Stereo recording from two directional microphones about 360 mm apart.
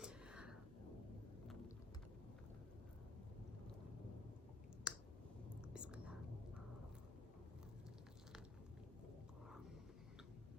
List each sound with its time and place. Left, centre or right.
0.0 s a sound: centre
4.9 s clicking: centre
5.7 s whispering: centre